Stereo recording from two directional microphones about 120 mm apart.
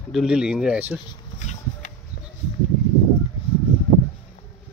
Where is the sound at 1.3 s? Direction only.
90° left.